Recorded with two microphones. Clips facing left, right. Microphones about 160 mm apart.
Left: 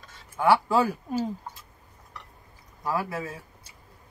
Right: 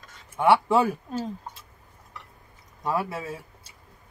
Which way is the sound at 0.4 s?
25° right (ahead or behind).